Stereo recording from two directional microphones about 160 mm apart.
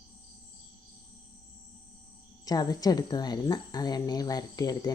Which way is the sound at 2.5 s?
25° left (ahead or behind).